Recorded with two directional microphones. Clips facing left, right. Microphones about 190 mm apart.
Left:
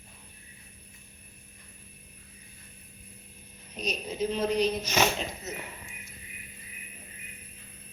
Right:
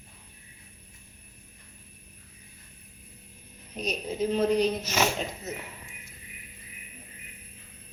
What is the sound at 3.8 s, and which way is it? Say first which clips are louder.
Speech: right 2 dB; 50° right (ahead or behind).